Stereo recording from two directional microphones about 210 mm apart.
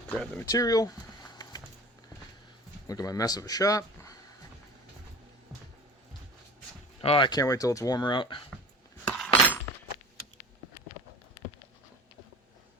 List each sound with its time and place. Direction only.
0.1 s speech: 10° left (ahead or behind)
2.8 s speech: 15° left (ahead or behind)
7.0 s speech: 25° left (ahead or behind)
9.1 s chink: 10° left (ahead or behind)